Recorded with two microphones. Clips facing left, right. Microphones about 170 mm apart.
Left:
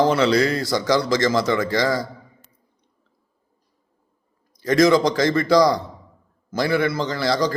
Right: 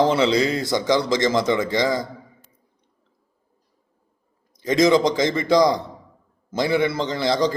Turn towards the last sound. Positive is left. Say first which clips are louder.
# right 1 dB
turn(degrees=-20)  # may be behind; listen again after turning